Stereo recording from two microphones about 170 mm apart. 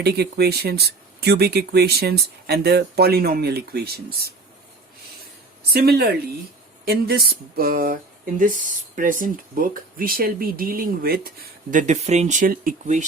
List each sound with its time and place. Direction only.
0.0 s speech: 70° right (ahead or behind)
5.7 s speech: 70° right (ahead or behind)
6.8 s a sound: 65° right (ahead or behind)
8.4 s speech: 50° right (ahead or behind)